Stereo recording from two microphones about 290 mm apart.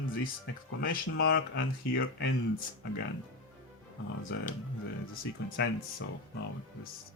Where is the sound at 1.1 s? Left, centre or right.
Left.